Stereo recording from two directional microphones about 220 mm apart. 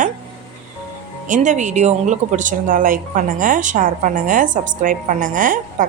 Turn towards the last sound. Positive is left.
turn(degrees=-35)  # may be behind; listen again after turning